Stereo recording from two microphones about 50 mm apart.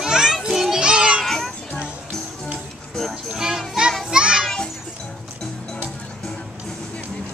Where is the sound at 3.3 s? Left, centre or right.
Centre.